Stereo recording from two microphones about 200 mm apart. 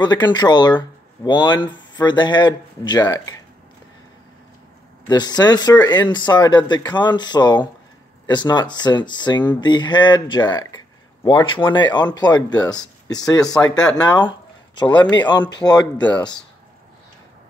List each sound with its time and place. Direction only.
0.0 s speech: 20° left (ahead or behind)
5.0 s speech: 20° left (ahead or behind)
14.8 s speech: 25° left (ahead or behind)